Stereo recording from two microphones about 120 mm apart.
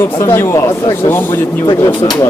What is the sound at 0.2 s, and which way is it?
Speech, 20° left (ahead or behind).